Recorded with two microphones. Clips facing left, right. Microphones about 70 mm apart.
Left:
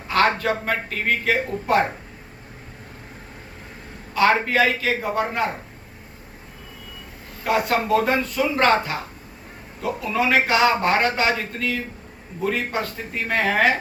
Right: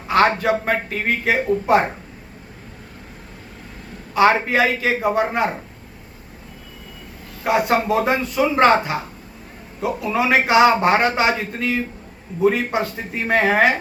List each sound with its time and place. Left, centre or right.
0.1 s a man's voice: centre
4.1 s a man's voice: centre
7.4 s a man's voice: centre